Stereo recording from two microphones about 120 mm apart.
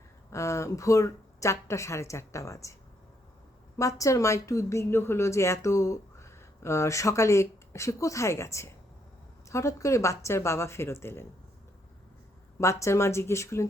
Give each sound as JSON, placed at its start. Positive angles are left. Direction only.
{"t": 0.3, "sound": "a woman's voice", "side_deg": 25}
{"t": 3.8, "sound": "a woman's voice", "side_deg": 25}
{"t": 12.5, "sound": "a woman's voice", "side_deg": 25}